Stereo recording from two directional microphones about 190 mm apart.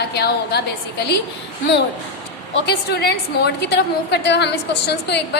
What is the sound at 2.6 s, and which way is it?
A woman's voice, 60° left (ahead or behind).